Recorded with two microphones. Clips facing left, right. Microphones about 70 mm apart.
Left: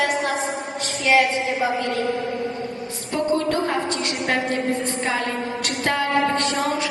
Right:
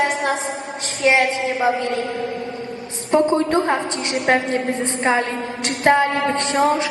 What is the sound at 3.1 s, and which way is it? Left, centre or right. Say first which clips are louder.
A woman's voice: right 5 dB; right.